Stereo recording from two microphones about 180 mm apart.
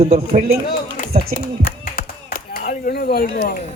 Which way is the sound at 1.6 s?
55° left (ahead or behind).